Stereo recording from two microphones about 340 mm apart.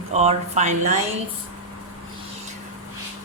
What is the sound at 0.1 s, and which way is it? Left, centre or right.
Speech, centre.